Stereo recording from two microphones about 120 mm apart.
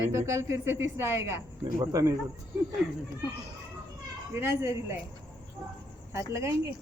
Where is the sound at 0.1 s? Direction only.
25° right (ahead or behind).